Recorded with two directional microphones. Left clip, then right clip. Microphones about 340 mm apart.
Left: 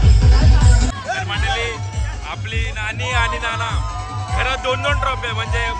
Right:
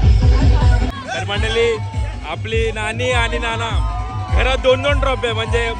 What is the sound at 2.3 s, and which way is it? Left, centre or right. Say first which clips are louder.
A man's voice: right 7 dB; centre.